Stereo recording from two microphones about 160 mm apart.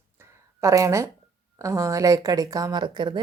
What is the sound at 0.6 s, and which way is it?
Speech, 20° right (ahead or behind).